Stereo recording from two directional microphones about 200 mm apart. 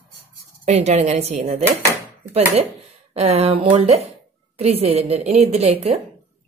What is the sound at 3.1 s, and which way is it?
A woman's voice, 30° right (ahead or behind).